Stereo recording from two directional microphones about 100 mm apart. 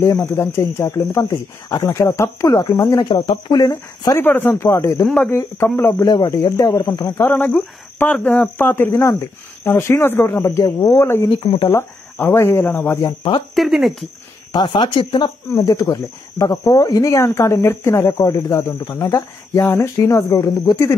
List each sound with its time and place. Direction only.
0.4 s speech: 25° left (ahead or behind)
3.1 s speech: 55° left (ahead or behind)
3.5 s speech: 35° left (ahead or behind)
4.2 s speech: 20° left (ahead or behind)
6.0 s speech: 45° left (ahead or behind)
7.2 s speech: 20° left (ahead or behind)
10.6 s speech: 40° left (ahead or behind)
11.2 s speech: 60° left (ahead or behind)
11.7 s speech: 25° left (ahead or behind)
13.0 s speech: 55° left (ahead or behind)
13.6 s speech: centre (ahead or behind)
14.5 s speech: 50° left (ahead or behind)
15.5 s speech: 35° left (ahead or behind)